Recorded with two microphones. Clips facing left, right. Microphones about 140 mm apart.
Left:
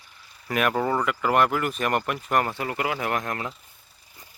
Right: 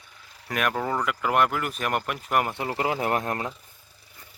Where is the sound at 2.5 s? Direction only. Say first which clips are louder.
Right 1 dB; 25° right (ahead or behind).